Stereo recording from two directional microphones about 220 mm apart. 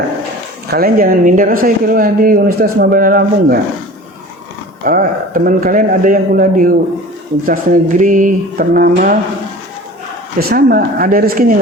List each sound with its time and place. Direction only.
0.7 s speech: 45° right (ahead or behind)
4.8 s speech: 40° right (ahead or behind)
10.5 s speech: 40° right (ahead or behind)